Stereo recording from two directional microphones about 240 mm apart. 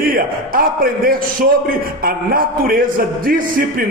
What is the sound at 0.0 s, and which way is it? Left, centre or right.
A man's voice, right.